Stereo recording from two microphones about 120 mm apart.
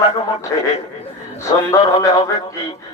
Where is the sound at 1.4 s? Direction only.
30° left (ahead or behind).